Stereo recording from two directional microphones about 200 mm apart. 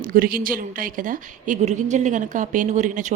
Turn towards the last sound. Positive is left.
turn(degrees=-35)  # may be behind; listen again after turning